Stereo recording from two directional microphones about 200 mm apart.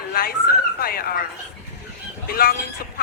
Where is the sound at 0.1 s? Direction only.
45° left (ahead or behind).